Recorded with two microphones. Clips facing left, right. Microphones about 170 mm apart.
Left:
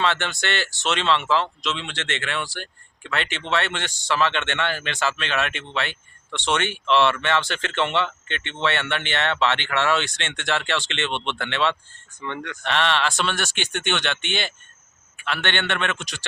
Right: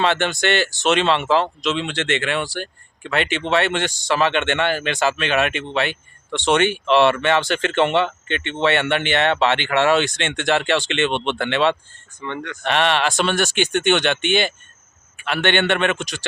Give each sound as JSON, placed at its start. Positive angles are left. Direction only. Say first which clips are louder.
{"t": 0.0, "sound": "speech", "louder": "right 5 dB", "side_deg": -15}
{"t": 12.2, "sound": "speech", "louder": "right 3 dB", "side_deg": 10}
{"t": 12.6, "sound": "speech", "louder": "right 4 dB", "side_deg": -15}